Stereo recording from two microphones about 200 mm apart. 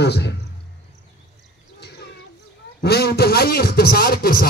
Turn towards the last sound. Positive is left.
turn(degrees=45)  # may be behind; listen again after turning